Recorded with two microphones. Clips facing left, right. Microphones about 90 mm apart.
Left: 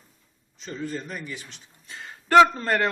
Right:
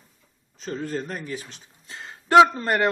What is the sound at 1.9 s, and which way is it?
Speech, 20° right (ahead or behind).